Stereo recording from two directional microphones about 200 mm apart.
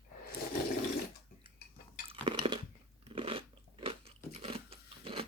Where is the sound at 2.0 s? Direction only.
25° right (ahead or behind).